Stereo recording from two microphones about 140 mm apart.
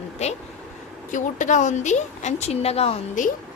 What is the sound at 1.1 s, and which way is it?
Speech, 65° left (ahead or behind).